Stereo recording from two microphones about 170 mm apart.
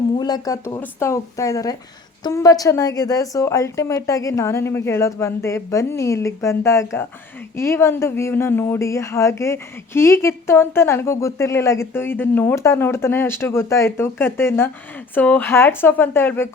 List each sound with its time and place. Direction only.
0.2 s speech: 25° left (ahead or behind)